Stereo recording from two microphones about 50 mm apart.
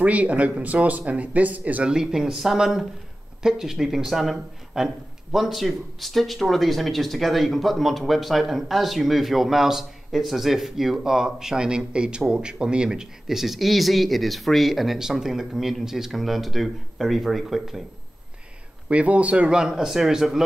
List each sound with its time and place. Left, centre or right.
0.0 s speech: right
1.9 s speech: centre
18.9 s speech: right
19.6 s speech: centre